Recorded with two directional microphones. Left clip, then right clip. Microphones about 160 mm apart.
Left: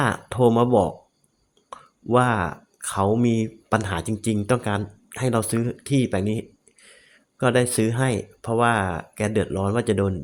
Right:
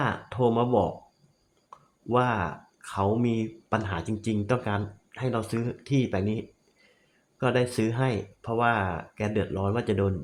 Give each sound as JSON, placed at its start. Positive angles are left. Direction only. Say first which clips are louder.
{"t": 0.0, "sound": "speech", "louder": "left 6 dB", "side_deg": 40}
{"t": 5.1, "sound": "speech", "louder": "left 6 dB", "side_deg": 45}